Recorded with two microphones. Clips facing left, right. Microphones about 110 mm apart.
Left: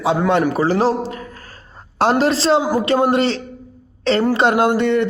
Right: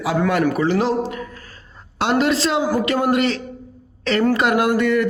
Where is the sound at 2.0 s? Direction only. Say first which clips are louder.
Left 2 dB; 35° left (ahead or behind).